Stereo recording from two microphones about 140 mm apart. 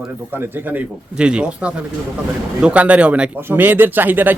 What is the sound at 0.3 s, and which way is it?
Speech, 15° right (ahead or behind).